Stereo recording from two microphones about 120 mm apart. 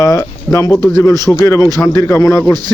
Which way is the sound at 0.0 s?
25° left (ahead or behind).